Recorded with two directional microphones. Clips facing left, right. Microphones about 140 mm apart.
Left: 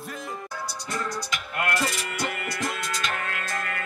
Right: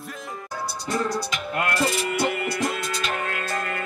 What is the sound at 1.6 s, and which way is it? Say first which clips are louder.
Music: right 3 dB; 30° right (ahead or behind).